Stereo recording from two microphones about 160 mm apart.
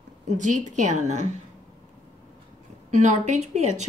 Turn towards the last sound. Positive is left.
turn(degrees=-45)  # may be behind; listen again after turning